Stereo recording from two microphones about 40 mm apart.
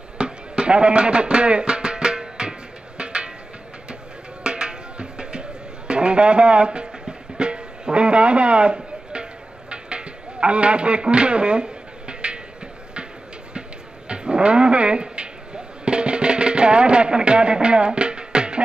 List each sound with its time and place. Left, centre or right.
0.2 s music: right
4.4 s music: right
13.5 s a sound: right